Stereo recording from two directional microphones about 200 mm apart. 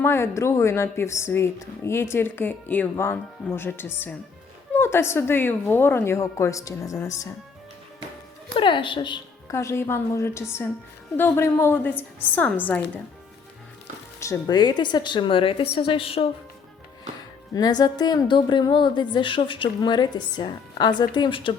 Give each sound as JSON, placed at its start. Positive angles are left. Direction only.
{"t": 0.0, "sound": "a woman's voice", "side_deg": 10}
{"t": 8.5, "sound": "a woman's voice", "side_deg": 25}
{"t": 14.2, "sound": "a woman's voice", "side_deg": 15}
{"t": 17.5, "sound": "a woman's voice", "side_deg": 20}